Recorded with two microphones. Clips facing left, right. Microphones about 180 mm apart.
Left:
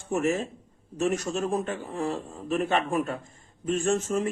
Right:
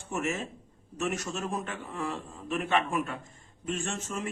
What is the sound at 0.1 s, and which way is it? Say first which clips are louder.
Speech: left 6 dB; 35° left (ahead or behind).